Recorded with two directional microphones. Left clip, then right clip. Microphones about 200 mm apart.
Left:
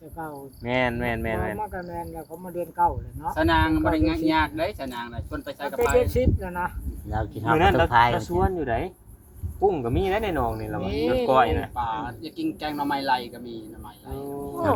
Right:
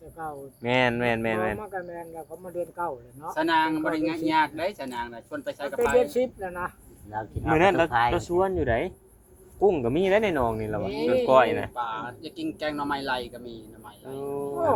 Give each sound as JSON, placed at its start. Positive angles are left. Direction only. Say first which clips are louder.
{"t": 0.2, "sound": "speech", "louder": "even", "side_deg": -5}
{"t": 0.6, "sound": "speech", "louder": "right 2 dB", "side_deg": -50}
{"t": 1.5, "sound": "speech", "louder": "left 3 dB", "side_deg": -5}
{"t": 3.3, "sound": "speech", "louder": "left 1 dB", "side_deg": -55}
{"t": 6.0, "sound": "speech", "louder": "left 1 dB", "side_deg": -10}
{"t": 7.1, "sound": "speech", "louder": "left 3 dB", "side_deg": 55}
{"t": 7.5, "sound": "speech", "louder": "left 1 dB", "side_deg": -45}
{"t": 7.9, "sound": "speech", "louder": "left 5 dB", "side_deg": 55}
{"t": 8.1, "sound": "speech", "louder": "even", "side_deg": -50}
{"t": 10.8, "sound": "speech", "louder": "left 1 dB", "side_deg": 0}
{"t": 11.3, "sound": "speech", "louder": "right 1 dB", "side_deg": -60}